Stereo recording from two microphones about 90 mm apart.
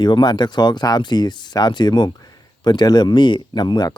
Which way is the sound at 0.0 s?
55° left (ahead or behind).